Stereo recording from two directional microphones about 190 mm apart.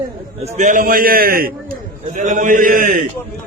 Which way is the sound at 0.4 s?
40° right (ahead or behind).